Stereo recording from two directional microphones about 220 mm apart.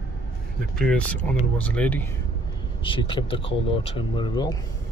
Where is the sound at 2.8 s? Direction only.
25° left (ahead or behind).